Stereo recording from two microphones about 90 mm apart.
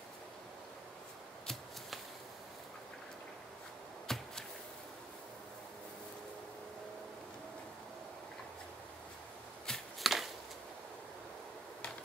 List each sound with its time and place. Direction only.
4.1 s arrow: 5° left (ahead or behind)
9.7 s chopping: centre (ahead or behind)